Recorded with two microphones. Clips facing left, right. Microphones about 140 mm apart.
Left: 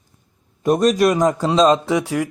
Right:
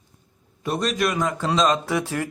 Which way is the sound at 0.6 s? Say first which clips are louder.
Left 9 dB; 45° left (ahead or behind).